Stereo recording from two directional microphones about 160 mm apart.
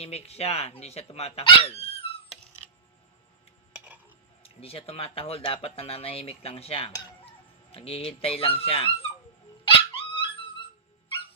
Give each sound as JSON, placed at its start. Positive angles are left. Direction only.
{"t": 0.0, "sound": "speech", "side_deg": 40}
{"t": 3.7, "sound": "a sound", "side_deg": -10}
{"t": 4.4, "sound": "speech", "side_deg": 35}
{"t": 9.6, "sound": "dog", "side_deg": 30}